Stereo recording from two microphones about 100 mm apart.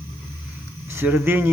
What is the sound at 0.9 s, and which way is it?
Speech, 20° right (ahead or behind).